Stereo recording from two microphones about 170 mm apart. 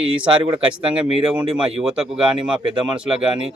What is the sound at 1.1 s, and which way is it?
Speech, 30° right (ahead or behind).